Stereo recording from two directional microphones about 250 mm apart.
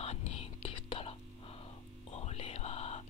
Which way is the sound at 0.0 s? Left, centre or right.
Left.